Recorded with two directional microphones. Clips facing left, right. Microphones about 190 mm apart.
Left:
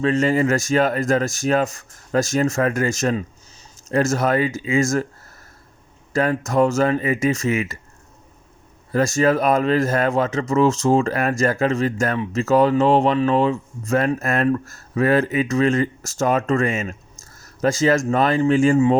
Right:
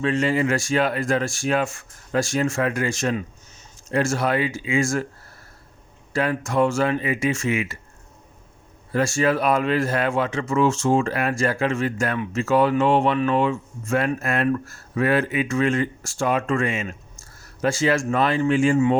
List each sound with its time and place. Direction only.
0.0 s speech: 40° left (ahead or behind)
6.1 s speech: 40° left (ahead or behind)
8.9 s speech: 40° left (ahead or behind)
17.3 s a sound: 40° left (ahead or behind)
18.1 s speech: 40° left (ahead or behind)